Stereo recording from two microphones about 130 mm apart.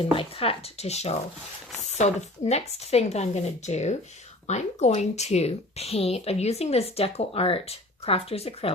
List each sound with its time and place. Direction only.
0.1 s speech: 45° left (ahead or behind)